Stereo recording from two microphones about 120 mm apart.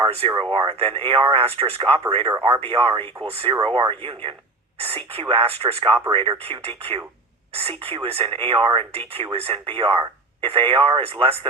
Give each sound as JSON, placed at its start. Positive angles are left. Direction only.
{"t": 0.0, "sound": "speech", "side_deg": -50}